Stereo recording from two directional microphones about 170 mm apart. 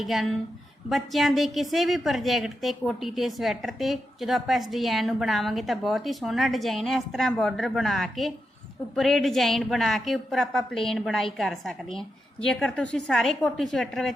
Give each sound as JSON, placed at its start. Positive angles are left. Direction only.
{"t": 0.0, "sound": "a woman's voice", "side_deg": 0}